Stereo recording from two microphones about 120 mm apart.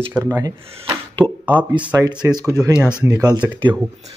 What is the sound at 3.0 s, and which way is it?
Speech, 30° right (ahead or behind).